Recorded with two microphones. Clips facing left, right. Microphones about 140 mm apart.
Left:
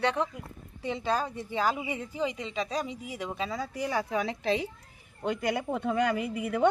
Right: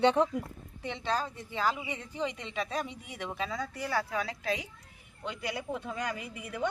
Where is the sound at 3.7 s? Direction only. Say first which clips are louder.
Left 3 dB; 20° left (ahead or behind).